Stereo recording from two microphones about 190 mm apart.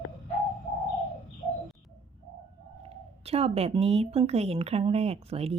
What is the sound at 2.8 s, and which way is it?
Speech, 30° right (ahead or behind).